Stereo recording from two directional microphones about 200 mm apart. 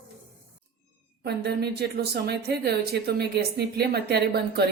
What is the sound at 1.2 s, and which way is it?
A woman's voice, 55° right (ahead or behind).